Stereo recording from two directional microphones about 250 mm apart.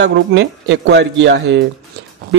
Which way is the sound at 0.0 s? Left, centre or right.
Right.